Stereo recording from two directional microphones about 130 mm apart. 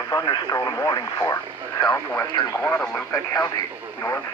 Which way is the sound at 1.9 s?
15° left (ahead or behind).